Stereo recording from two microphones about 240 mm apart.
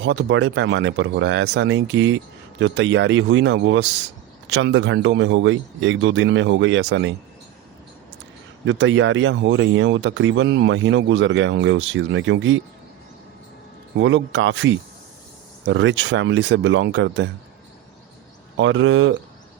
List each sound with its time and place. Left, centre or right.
0.0 s speech: right
8.6 s speech: right
14.0 s speech: right
18.5 s speech: right